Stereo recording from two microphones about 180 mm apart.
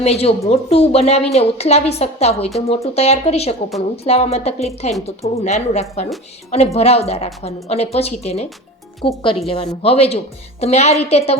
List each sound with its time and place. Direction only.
0.0 s a woman's voice: 35° left (ahead or behind)